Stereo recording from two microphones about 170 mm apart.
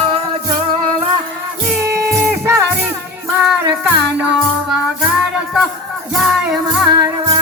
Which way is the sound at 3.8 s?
5° right (ahead or behind).